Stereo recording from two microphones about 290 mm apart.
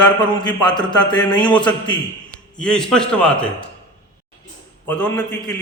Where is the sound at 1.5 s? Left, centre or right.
Centre.